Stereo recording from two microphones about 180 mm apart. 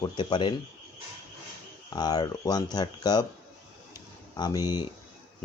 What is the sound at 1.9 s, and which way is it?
Speech, 20° left (ahead or behind).